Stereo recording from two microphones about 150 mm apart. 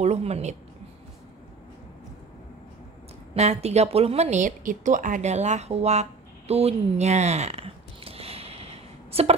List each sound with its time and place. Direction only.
0.0 s a woman's voice: 45° right (ahead or behind)
3.3 s a woman's voice: 45° right (ahead or behind)